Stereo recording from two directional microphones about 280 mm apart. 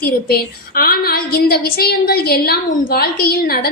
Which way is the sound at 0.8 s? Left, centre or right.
Left.